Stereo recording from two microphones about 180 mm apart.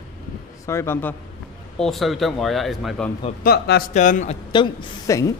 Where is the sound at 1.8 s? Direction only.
Centre (ahead or behind).